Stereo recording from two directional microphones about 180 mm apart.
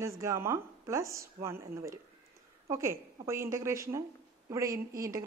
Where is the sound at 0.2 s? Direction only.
15° right (ahead or behind).